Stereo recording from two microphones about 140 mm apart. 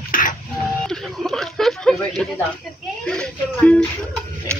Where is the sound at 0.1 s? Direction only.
80° left.